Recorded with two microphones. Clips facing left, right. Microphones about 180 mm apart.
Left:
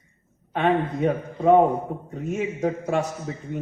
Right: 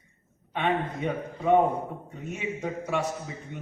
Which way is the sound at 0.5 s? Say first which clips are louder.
Left 6 dB; 45° left (ahead or behind).